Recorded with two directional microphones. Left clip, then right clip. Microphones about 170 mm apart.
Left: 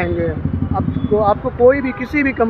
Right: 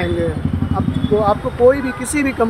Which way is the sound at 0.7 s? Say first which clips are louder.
Left 1 dB; 15° right (ahead or behind).